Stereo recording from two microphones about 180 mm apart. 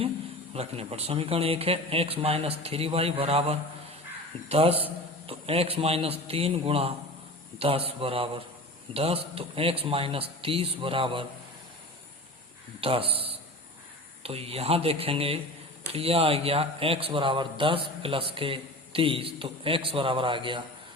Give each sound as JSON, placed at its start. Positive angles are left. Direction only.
{"t": 0.5, "sound": "a man's voice", "side_deg": -35}
{"t": 12.8, "sound": "a man's voice", "side_deg": -30}